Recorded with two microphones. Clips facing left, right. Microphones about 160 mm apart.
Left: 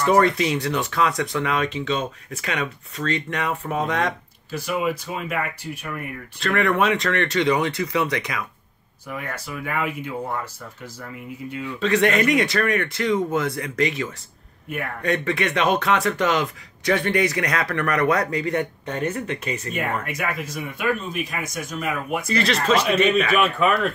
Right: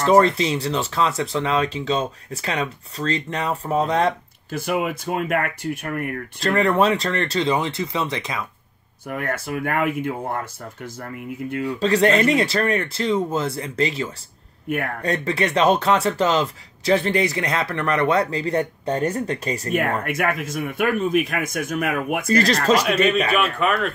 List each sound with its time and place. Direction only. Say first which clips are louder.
0.0 s speech: right 2 dB; 30° right (ahead or behind)
4.5 s speech: right 1 dB; 50° right (ahead or behind)
6.4 s speech: right 2 dB; 30° right (ahead or behind)
9.0 s speech: right 5 dB; 50° right (ahead or behind)
11.6 s speech: right 2 dB; 35° right (ahead or behind)
19.7 s speech: right 6 dB; 50° right (ahead or behind)
23.0 s speech: even; centre (ahead or behind)